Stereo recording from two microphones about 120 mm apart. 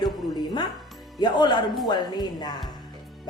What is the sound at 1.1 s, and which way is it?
A woman's voice, 35° left (ahead or behind).